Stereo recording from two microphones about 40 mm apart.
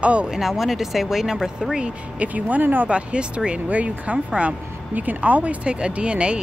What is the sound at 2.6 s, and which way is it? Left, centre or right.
Speech, right.